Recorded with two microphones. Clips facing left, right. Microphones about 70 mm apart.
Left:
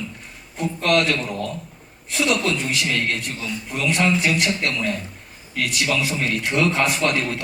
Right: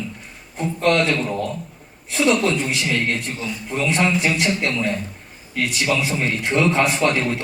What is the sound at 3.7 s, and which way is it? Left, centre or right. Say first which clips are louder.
Speech: right 1 dB; right.